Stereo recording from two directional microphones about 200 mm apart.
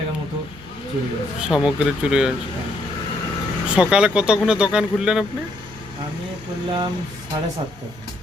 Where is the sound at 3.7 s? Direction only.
5° right (ahead or behind).